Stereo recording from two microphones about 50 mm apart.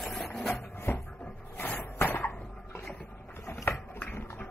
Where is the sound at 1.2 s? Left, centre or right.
Left.